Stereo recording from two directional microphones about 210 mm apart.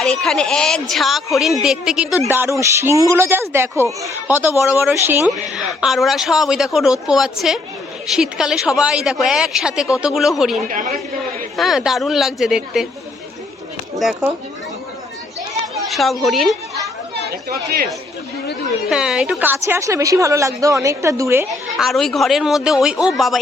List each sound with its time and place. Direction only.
0.0 s a woman's voice: centre (ahead or behind)
10.7 s speech: 40° right (ahead or behind)
11.5 s a woman's voice: centre (ahead or behind)
14.0 s a woman's voice: 5° right (ahead or behind)
15.9 s a woman's voice: centre (ahead or behind)
18.9 s a woman's voice: 5° right (ahead or behind)
21.8 s a woman's voice: centre (ahead or behind)